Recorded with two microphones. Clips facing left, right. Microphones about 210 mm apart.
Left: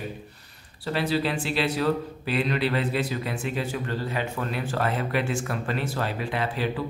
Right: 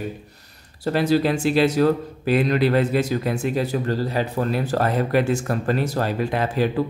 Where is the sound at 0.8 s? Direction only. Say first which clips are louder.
Right 7 dB; 45° right (ahead or behind).